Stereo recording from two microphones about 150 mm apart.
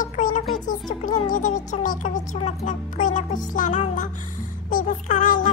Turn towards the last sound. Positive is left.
turn(degrees=60)  # may be behind; listen again after turning